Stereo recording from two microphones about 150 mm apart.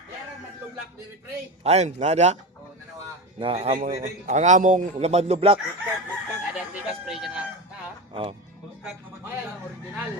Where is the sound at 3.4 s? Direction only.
40° right (ahead or behind).